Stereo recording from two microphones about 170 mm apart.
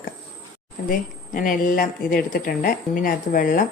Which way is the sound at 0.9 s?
50° left (ahead or behind).